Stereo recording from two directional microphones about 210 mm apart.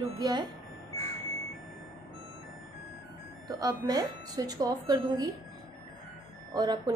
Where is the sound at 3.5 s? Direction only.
20° right (ahead or behind).